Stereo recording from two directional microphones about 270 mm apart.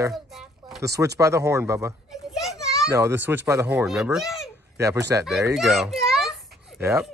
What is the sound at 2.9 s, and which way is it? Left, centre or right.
Speech, centre.